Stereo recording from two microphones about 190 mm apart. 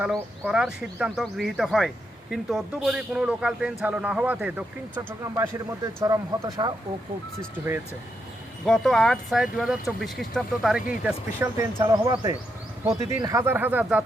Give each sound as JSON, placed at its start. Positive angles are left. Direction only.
{"t": 0.0, "sound": "speech", "side_deg": -5}
{"t": 8.6, "sound": "speech", "side_deg": 0}